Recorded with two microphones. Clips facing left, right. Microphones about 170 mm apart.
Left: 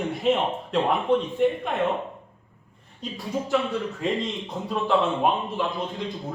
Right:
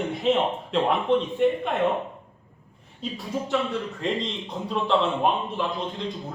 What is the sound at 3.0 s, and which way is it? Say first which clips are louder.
Speech: even; centre (ahead or behind).